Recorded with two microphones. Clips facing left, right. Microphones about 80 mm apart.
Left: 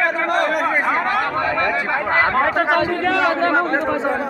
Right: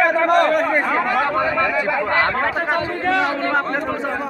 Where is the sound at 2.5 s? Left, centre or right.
Left.